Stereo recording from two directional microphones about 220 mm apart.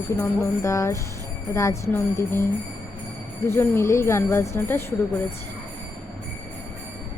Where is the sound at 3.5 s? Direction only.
10° left (ahead or behind).